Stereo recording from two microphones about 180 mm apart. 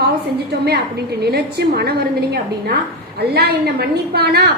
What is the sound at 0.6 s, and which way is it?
A woman's voice, 65° right (ahead or behind).